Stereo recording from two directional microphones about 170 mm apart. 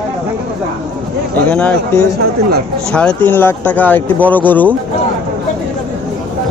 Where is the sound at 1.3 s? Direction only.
10° left (ahead or behind).